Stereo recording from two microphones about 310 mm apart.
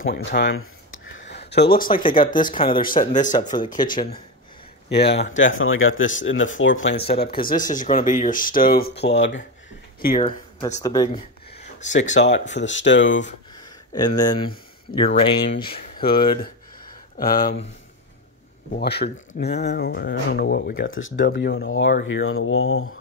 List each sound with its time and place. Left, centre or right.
0.0 s speech: left
1.9 s speech: centre
3.3 s speech: centre
3.7 s speech: left
4.8 s speech: left
6.9 s speech: left
10.0 s speech: left
10.6 s speech: centre
11.5 s a sound: left
12.1 s speech: left
13.6 s a sound: centre
15.0 s speech: centre
17.2 s speech: left
18.8 s speech: left